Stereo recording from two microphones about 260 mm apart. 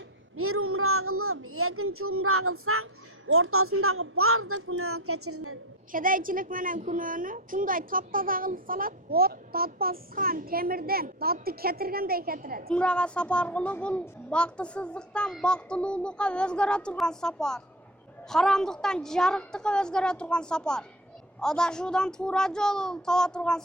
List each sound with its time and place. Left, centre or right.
0.3 s a woman's voice: right
5.9 s a woman's voice: right
12.7 s a woman's voice: centre